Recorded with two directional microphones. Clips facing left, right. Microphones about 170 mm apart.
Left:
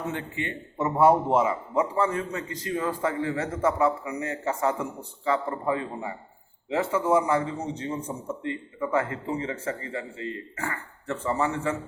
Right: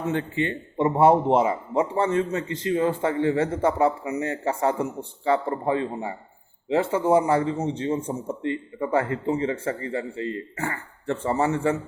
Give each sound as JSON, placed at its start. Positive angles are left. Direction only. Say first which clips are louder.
{"t": 0.1, "sound": "a man's voice", "louder": "right 7 dB", "side_deg": -30}